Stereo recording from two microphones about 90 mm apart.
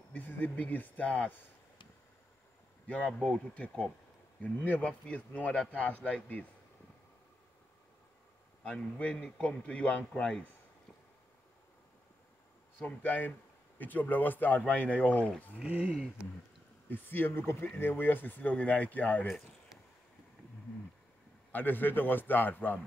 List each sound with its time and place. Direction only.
0.1 s speech: 20° left (ahead or behind)
3.1 s a man's voice: 10° left (ahead or behind)
8.6 s a man's voice: 10° left (ahead or behind)
12.7 s a man's voice: 20° left (ahead or behind)
15.6 s speech: 15° right (ahead or behind)
16.9 s speech: 25° left (ahead or behind)
19.2 s a sound: 5° right (ahead or behind)
21.5 s speech: 20° left (ahead or behind)